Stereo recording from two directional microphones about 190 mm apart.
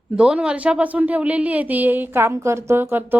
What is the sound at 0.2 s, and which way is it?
A woman's voice, 5° right (ahead or behind).